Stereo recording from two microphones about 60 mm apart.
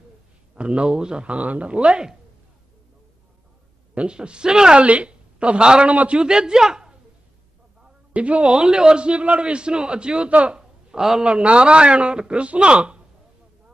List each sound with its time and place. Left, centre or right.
0.6 s speech: centre
3.9 s a man's voice: centre
8.1 s a man's voice: right